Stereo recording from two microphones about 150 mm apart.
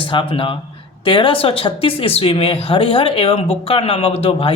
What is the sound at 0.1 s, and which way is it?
Speech, 35° left (ahead or behind).